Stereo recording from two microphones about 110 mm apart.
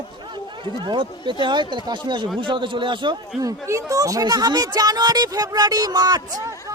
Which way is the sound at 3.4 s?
30° right (ahead or behind).